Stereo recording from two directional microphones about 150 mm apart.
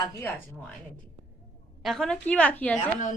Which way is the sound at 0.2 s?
15° left (ahead or behind).